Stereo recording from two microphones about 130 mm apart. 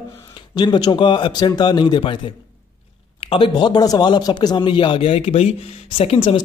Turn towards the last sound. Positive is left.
turn(degrees=40)  # may be behind; listen again after turning